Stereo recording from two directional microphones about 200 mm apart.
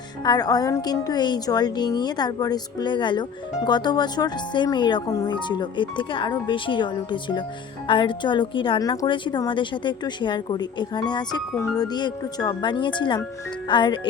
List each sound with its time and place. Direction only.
0.3 s a woman's voice: 20° left (ahead or behind)